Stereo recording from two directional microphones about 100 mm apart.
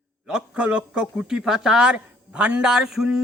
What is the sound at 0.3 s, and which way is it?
A man's voice, 10° right (ahead or behind).